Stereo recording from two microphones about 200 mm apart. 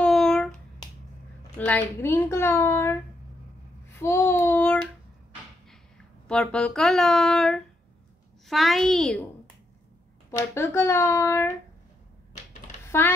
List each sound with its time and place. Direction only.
0.0 s a sound: centre (ahead or behind)
1.7 s a child's voice: 10° left (ahead or behind)
3.9 s child singing: 15° left (ahead or behind)
6.2 s speech: 5° left (ahead or behind)
10.3 s a child's voice: 15° left (ahead or behind)
12.8 s a sound: 15° left (ahead or behind)